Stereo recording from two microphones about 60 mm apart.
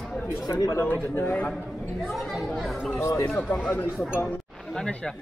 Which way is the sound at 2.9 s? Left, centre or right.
Left.